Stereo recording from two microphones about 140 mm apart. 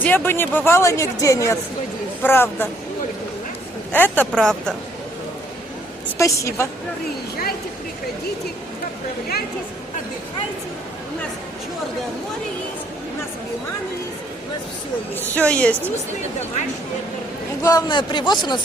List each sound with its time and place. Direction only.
0.0 s a woman's voice: 15° left (ahead or behind)
3.9 s a woman's voice: 15° left (ahead or behind)
6.1 s speech: 20° left (ahead or behind)
15.1 s a woman's voice: 10° left (ahead or behind)
17.6 s a man's voice: 25° left (ahead or behind)